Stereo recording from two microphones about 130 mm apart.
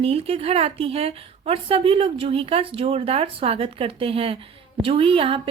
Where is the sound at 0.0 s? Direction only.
50° right (ahead or behind).